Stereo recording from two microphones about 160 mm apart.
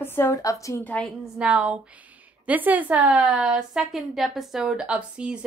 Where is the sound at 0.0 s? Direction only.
15° left (ahead or behind).